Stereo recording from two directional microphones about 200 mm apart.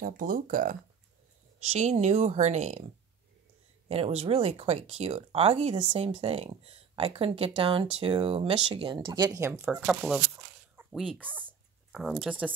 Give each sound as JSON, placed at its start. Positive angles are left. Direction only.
{"t": 0.0, "sound": "speech", "side_deg": -45}
{"t": 3.9, "sound": "speech", "side_deg": -30}